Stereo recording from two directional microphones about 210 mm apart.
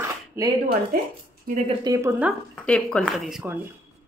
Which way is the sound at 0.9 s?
45° right (ahead or behind).